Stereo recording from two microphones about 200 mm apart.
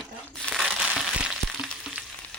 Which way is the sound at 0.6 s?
Centre (ahead or behind).